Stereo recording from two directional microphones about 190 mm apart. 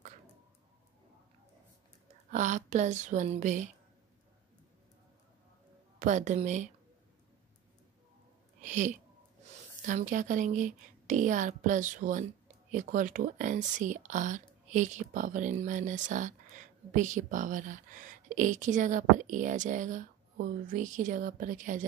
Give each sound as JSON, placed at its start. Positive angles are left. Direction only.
{"t": 2.3, "sound": "speech", "side_deg": -40}
{"t": 5.9, "sound": "speech", "side_deg": -40}
{"t": 8.6, "sound": "speech", "side_deg": -40}